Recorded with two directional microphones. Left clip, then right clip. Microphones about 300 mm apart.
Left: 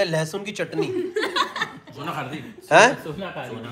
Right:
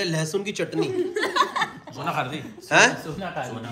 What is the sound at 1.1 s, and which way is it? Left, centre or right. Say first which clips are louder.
Chuckle: right 2 dB; right.